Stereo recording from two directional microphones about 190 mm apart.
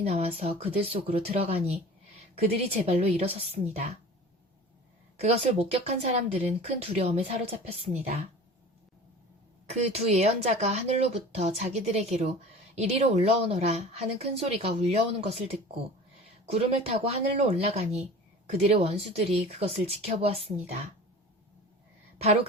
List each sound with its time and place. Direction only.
0.0 s speech: 35° right (ahead or behind)
5.2 s speech: 35° right (ahead or behind)
9.6 s speech: 35° right (ahead or behind)
22.2 s speech: 35° right (ahead or behind)